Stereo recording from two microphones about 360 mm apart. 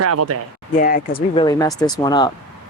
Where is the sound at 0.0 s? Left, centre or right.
Right.